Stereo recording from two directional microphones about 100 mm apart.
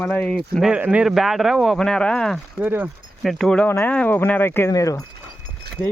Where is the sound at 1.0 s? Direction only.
Centre (ahead or behind).